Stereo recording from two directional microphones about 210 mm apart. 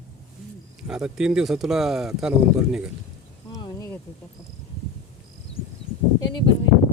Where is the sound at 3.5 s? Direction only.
20° left (ahead or behind).